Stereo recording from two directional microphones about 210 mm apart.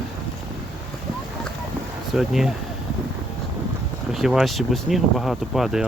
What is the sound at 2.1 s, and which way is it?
Speech, centre (ahead or behind).